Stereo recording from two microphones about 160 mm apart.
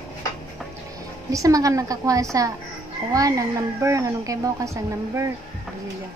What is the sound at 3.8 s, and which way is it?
A woman's voice, 20° right (ahead or behind).